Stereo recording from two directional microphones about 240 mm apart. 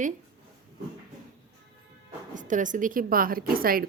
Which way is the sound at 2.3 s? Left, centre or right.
Right.